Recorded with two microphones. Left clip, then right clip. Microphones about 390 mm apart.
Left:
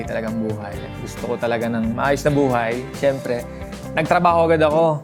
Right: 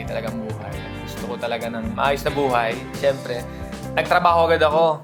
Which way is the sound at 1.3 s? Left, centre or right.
Left.